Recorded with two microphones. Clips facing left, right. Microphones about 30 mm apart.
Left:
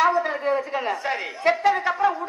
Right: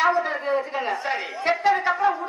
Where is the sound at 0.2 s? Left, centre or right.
Centre.